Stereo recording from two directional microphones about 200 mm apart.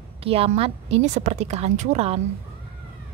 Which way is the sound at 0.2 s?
30° right (ahead or behind).